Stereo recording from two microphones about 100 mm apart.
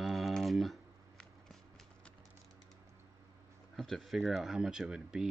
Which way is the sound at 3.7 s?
Centre (ahead or behind).